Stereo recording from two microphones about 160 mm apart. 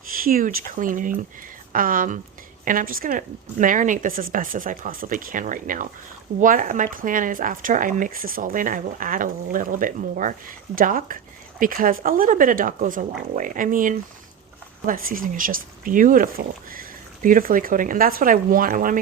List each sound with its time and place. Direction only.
0.2 s speech: 60° right (ahead or behind)